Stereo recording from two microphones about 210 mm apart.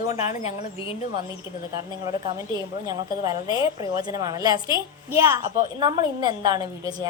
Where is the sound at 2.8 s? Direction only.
20° right (ahead or behind).